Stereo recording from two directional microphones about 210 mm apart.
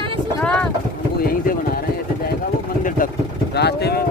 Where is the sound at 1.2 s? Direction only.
45° left (ahead or behind).